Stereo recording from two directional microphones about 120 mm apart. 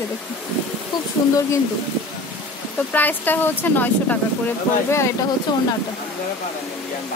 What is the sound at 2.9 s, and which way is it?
Speech, 15° left (ahead or behind).